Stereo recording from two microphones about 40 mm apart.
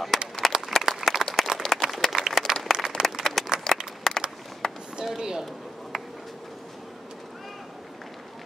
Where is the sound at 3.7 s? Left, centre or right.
Centre.